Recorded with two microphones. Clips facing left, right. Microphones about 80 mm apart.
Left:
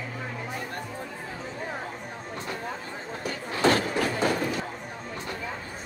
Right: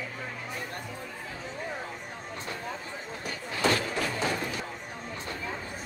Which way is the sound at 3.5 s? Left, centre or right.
Left.